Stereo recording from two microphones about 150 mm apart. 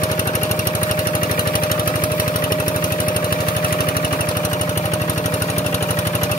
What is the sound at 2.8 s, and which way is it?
Lawn mower, 65° left (ahead or behind).